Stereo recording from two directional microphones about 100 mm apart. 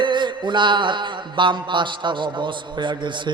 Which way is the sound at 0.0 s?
50° right (ahead or behind).